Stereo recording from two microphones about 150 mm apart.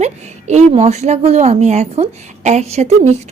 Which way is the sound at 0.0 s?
50° right (ahead or behind).